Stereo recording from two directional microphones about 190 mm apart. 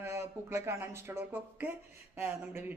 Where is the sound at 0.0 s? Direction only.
15° right (ahead or behind).